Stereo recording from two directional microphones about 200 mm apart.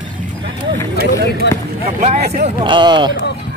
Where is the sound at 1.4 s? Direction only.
60° left (ahead or behind).